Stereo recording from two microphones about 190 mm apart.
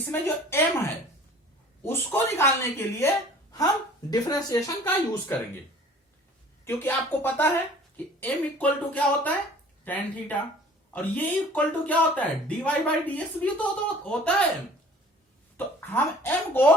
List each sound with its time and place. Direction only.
0.1 s speech: 10° left (ahead or behind)
2.1 s speech: 10° left (ahead or behind)
4.1 s speech: 20° left (ahead or behind)
6.7 s speech: 10° left (ahead or behind)
15.5 s speech: 10° left (ahead or behind)